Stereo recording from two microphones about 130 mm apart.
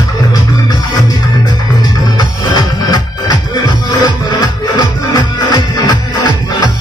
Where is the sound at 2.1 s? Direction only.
30° left (ahead or behind).